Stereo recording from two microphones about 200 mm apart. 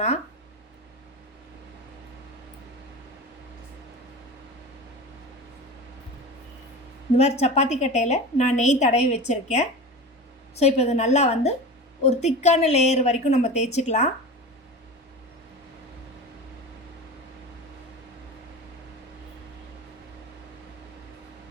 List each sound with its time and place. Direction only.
7.2 s a woman's voice: 30° left (ahead or behind)